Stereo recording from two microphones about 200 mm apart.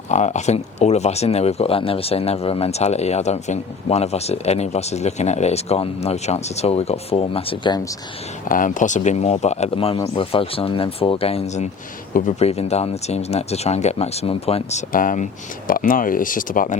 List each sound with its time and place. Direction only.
0.1 s speech: 35° left (ahead or behind)
8.4 s speech: 40° left (ahead or behind)